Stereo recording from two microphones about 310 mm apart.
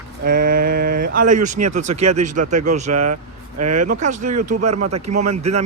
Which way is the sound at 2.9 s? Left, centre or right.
Right.